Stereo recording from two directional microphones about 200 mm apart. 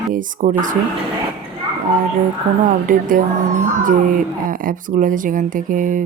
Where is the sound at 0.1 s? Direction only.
40° right (ahead or behind).